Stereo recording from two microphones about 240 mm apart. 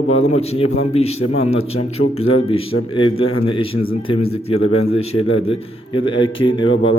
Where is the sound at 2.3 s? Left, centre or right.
Left.